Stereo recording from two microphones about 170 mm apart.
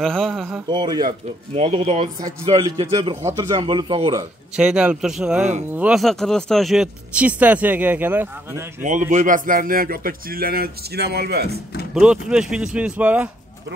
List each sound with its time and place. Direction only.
0.0 s speech: centre (ahead or behind)
0.7 s speech: 25° right (ahead or behind)
1.5 s speech: 35° right (ahead or behind)
2.5 s speech: 20° right (ahead or behind)
4.6 s speech: 5° right (ahead or behind)
9.1 s speech: 50° right (ahead or behind); by 11.6 s 70° right (ahead or behind)
11.9 s speech: 5° right (ahead or behind)